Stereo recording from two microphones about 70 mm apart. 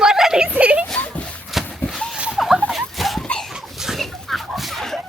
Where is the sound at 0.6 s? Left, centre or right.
Centre.